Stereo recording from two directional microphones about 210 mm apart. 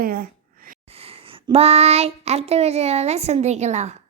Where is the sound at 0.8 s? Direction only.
30° right (ahead or behind).